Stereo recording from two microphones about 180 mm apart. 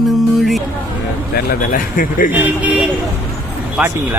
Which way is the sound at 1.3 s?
55° left (ahead or behind).